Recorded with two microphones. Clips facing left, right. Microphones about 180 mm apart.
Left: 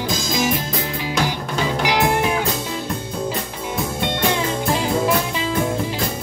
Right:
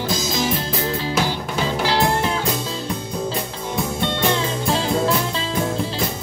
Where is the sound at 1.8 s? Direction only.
15° left (ahead or behind).